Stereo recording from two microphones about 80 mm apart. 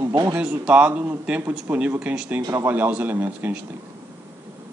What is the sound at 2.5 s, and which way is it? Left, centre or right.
Speech, right.